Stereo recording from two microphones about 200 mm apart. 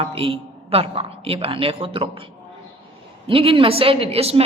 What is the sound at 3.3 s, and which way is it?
Speech, 25° right (ahead or behind).